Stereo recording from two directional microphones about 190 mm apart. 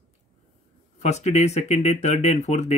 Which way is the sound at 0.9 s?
35° left (ahead or behind).